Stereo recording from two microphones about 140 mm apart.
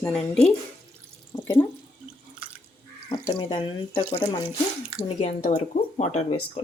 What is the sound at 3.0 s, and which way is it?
Speech, 30° left (ahead or behind).